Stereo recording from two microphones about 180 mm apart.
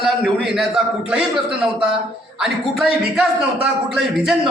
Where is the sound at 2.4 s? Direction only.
Centre (ahead or behind).